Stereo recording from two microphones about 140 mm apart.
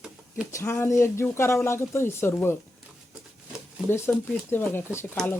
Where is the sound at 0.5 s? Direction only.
20° left (ahead or behind).